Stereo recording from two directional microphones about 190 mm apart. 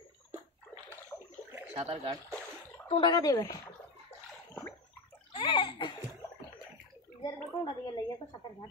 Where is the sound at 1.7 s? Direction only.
30° right (ahead or behind).